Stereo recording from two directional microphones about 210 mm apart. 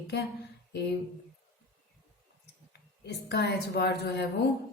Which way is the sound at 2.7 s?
50° left (ahead or behind).